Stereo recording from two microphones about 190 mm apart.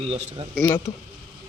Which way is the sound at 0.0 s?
30° right (ahead or behind).